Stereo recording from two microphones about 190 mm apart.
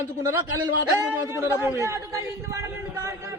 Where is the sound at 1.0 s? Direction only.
15° right (ahead or behind).